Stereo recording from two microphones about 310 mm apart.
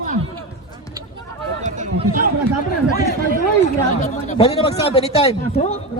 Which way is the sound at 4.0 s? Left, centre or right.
Centre.